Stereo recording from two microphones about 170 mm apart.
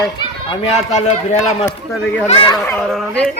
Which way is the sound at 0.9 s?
45° left (ahead or behind).